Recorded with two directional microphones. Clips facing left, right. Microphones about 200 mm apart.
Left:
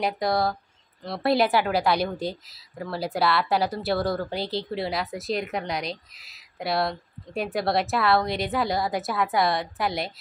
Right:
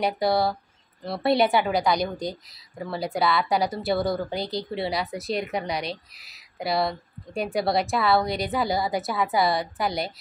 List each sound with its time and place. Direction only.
0.0 s speech: centre (ahead or behind)